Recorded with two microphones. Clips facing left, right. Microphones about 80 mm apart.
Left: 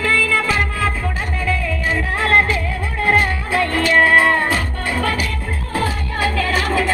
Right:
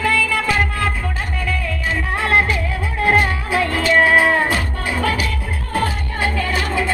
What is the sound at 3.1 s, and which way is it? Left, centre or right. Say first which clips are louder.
Music: even; centre.